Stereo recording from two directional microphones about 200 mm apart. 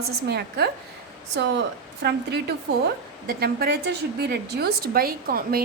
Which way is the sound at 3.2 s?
50° right (ahead or behind).